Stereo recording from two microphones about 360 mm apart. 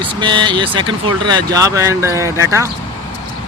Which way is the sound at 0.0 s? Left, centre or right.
Centre.